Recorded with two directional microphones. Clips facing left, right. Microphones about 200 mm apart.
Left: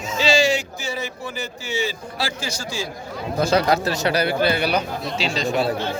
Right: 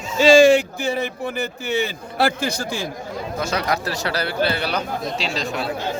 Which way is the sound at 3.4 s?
30° left (ahead or behind).